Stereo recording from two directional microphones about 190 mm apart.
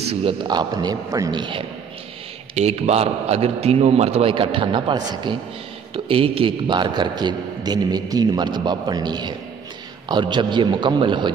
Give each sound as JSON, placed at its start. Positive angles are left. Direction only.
{"t": 0.1, "sound": "a man's voice", "side_deg": -25}
{"t": 2.5, "sound": "a man's voice", "side_deg": -35}